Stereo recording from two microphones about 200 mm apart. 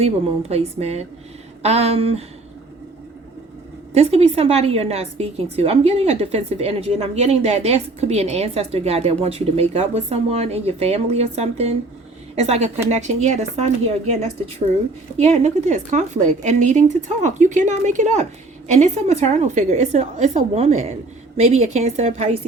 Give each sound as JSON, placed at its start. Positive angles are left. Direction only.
{"t": 0.0, "sound": "a woman's voice", "side_deg": -30}
{"t": 3.9, "sound": "a woman's voice", "side_deg": -30}
{"t": 15.2, "sound": "a woman's voice", "side_deg": -35}